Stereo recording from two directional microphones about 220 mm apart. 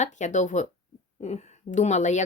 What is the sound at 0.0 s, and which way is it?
Speech, 35° left (ahead or behind).